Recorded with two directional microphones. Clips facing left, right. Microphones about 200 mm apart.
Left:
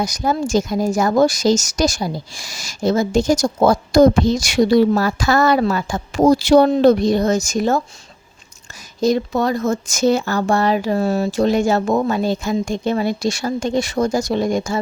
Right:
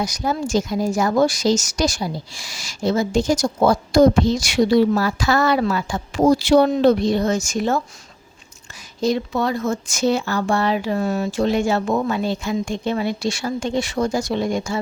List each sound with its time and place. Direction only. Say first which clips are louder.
0.0 s speech: left 3 dB; 45° left (ahead or behind)
9.0 s speech: left 3 dB; 45° left (ahead or behind)